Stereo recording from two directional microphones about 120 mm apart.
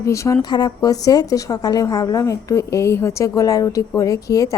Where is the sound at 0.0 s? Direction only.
25° left (ahead or behind).